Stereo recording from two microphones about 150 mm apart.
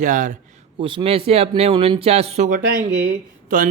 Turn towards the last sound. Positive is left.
turn(degrees=-80)